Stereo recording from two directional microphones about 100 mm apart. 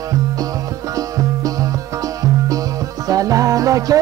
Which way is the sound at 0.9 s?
35° right (ahead or behind).